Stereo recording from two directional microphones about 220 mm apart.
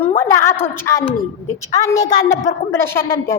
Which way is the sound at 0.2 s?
10° left (ahead or behind).